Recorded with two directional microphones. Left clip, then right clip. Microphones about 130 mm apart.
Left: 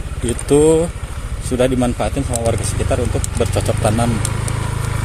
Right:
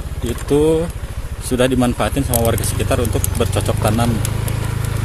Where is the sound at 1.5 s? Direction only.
10° right (ahead or behind).